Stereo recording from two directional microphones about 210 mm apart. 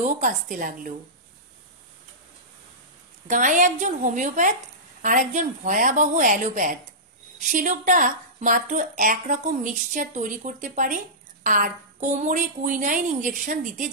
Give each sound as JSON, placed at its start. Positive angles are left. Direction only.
{"t": 0.0, "sound": "speech", "side_deg": -40}
{"t": 3.3, "sound": "speech", "side_deg": -40}